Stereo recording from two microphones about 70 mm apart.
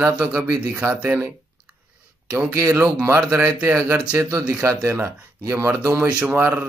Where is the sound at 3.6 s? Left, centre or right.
Right.